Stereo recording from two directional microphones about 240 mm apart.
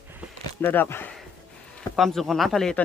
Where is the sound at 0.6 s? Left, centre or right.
Centre.